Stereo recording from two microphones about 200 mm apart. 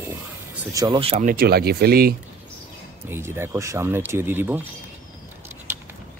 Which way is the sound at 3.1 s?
10° right (ahead or behind).